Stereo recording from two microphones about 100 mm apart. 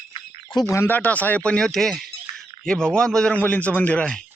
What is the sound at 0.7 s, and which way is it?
Speech, 20° left (ahead or behind).